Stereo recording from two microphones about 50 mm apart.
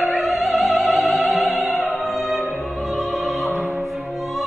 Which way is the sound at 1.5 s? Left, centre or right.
Right.